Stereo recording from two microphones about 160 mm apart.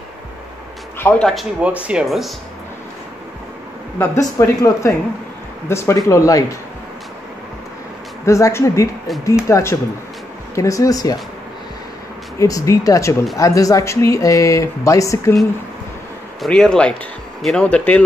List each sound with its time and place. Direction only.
0.9 s a man's voice: 10° left (ahead or behind)
1.3 s speech: 5° right (ahead or behind)
4.0 s speech: 15° left (ahead or behind)
8.3 s speech: 15° left (ahead or behind)
12.4 s speech: 20° left (ahead or behind)
16.3 s speech: 5° left (ahead or behind)